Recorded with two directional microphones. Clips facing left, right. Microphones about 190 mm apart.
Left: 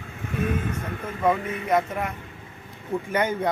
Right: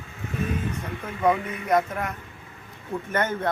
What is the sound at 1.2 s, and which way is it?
A man's voice, 5° left (ahead or behind).